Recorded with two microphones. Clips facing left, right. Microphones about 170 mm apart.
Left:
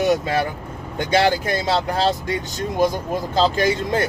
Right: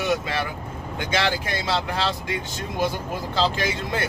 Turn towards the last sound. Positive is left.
turn(degrees=40)  # may be behind; listen again after turning